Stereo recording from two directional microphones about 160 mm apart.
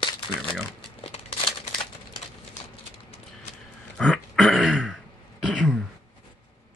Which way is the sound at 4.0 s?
5° left (ahead or behind).